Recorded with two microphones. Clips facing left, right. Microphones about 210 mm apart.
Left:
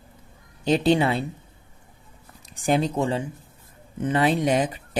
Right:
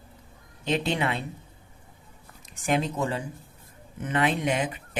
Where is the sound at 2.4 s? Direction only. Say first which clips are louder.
Left 4 dB; 35° left (ahead or behind).